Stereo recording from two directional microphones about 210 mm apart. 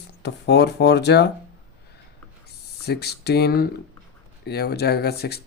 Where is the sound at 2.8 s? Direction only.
50° left (ahead or behind).